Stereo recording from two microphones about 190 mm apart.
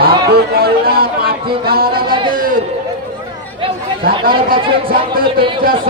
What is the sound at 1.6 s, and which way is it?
Speech, 50° right (ahead or behind).